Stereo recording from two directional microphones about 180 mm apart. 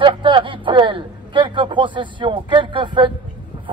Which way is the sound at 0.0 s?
30° right (ahead or behind).